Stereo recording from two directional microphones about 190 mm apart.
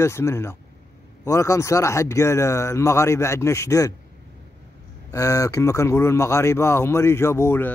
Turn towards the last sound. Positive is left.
turn(degrees=15)  # may be behind; listen again after turning